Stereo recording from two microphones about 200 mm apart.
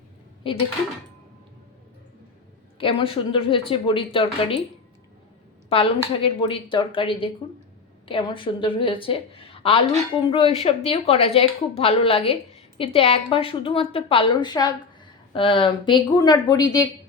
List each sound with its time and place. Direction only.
2.7 s a woman's voice: 25° left (ahead or behind)
5.6 s a woman's voice: 25° left (ahead or behind)